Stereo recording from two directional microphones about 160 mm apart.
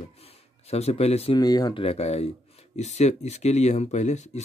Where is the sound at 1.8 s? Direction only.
40° left (ahead or behind).